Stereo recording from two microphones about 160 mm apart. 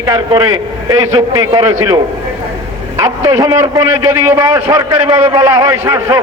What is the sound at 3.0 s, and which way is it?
A man's voice, 20° right (ahead or behind).